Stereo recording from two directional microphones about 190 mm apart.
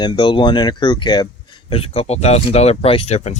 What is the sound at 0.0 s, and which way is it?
Speech, 25° left (ahead or behind).